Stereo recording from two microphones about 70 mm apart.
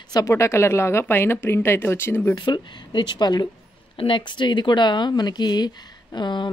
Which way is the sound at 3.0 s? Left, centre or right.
Left.